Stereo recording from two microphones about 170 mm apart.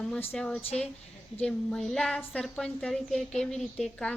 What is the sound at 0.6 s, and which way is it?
Speech, 40° left (ahead or behind).